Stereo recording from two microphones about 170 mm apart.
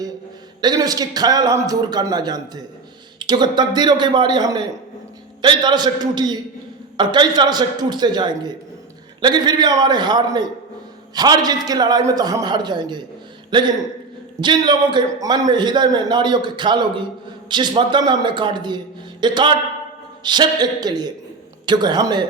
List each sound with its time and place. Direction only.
0.6 s a man's voice: 25° right (ahead or behind)